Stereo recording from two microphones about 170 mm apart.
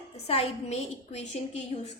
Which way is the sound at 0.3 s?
35° left (ahead or behind).